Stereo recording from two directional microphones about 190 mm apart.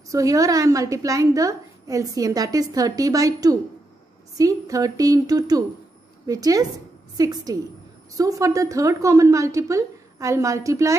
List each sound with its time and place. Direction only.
0.1 s a woman's voice: 15° right (ahead or behind)